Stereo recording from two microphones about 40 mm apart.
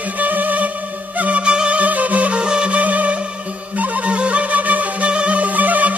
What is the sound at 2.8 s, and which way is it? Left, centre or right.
Music, right.